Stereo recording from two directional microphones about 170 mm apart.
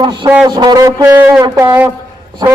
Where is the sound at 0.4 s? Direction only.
25° right (ahead or behind).